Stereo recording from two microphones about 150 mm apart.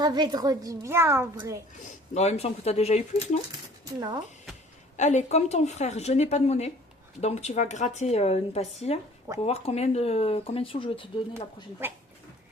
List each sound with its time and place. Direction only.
0.0 s a woman's voice: 25° right (ahead or behind)
1.8 s speech: 45° left (ahead or behind)
4.9 s speech: 50° left (ahead or behind); by 11.1 s 35° left (ahead or behind)
11.8 s speech: 15° right (ahead or behind)